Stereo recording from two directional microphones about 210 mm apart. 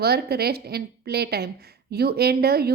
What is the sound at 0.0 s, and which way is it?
Speech, 50° right (ahead or behind).